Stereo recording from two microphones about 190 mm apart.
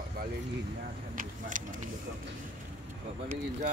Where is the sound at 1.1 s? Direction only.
45° right (ahead or behind).